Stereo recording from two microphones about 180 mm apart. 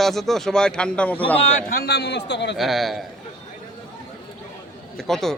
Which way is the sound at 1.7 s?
60° left (ahead or behind).